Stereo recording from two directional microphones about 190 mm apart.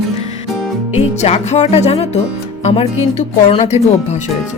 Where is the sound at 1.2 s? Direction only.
35° left (ahead or behind).